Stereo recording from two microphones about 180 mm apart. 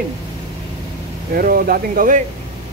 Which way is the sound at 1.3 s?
50° right (ahead or behind).